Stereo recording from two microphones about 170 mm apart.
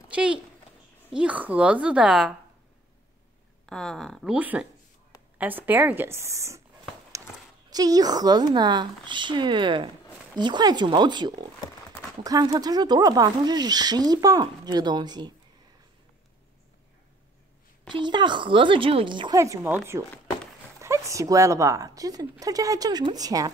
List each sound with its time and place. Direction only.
0.1 s a child's voice: 5° right (ahead or behind)
3.6 s a woman's voice: 5° left (ahead or behind); by 6.6 s 15° right (ahead or behind)
7.7 s speech: 20° right (ahead or behind)
17.8 s speech: 25° right (ahead or behind)